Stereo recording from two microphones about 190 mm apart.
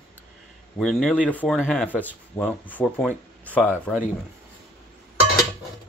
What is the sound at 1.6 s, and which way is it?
Speech, 5° left (ahead or behind).